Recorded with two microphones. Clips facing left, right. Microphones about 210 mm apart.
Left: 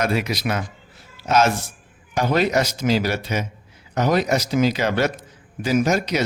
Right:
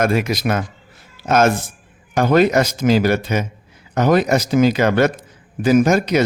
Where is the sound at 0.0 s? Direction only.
50° right (ahead or behind).